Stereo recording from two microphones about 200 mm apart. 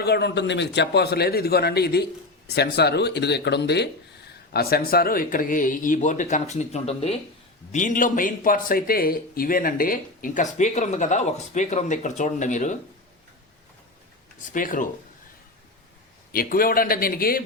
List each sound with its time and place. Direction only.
0.0 s a man's voice: 55° left (ahead or behind); by 12.7 s 40° left (ahead or behind)
14.5 s a man's voice: 40° left (ahead or behind)
16.3 s a man's voice: 45° left (ahead or behind)